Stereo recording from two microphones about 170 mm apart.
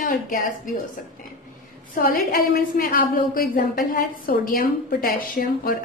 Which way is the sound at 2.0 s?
60° left (ahead or behind).